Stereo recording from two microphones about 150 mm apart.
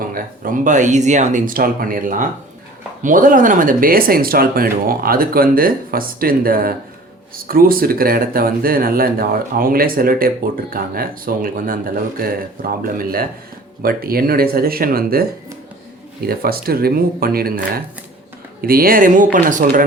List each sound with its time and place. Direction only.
0.1 s speech: 65° right (ahead or behind); by 17.6 s 90° right
18.6 s speech: 80° right; by 19.8 s 60° right (ahead or behind)